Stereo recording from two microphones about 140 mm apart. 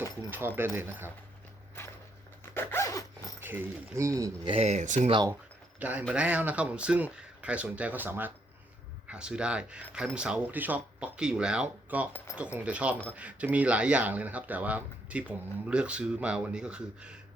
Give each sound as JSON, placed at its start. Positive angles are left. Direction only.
{"t": 0.0, "sound": "speech", "side_deg": -15}
{"t": 1.8, "sound": "walk", "side_deg": 20}
{"t": 2.6, "sound": "zipper", "side_deg": 15}
{"t": 3.4, "sound": "a sound", "side_deg": -15}
{"t": 3.9, "sound": "speech", "side_deg": -20}
{"t": 4.4, "sound": "speech", "side_deg": -45}
{"t": 5.8, "sound": "speech", "side_deg": -10}